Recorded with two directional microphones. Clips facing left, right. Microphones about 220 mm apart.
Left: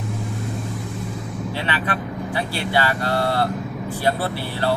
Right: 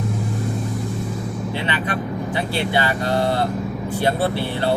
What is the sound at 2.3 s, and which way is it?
Speech, 20° right (ahead or behind).